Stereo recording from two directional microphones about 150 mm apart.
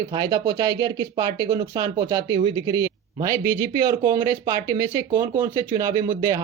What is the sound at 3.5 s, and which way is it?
Speech, 75° right (ahead or behind).